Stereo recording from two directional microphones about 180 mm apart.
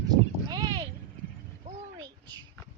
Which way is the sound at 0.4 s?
25° right (ahead or behind).